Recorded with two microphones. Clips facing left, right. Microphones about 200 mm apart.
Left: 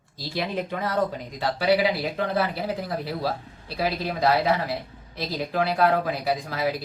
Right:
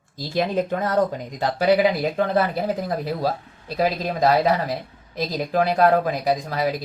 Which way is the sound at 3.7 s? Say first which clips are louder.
Right 4 dB; 40° right (ahead or behind).